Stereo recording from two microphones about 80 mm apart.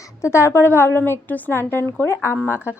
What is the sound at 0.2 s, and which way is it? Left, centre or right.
A woman's voice, left.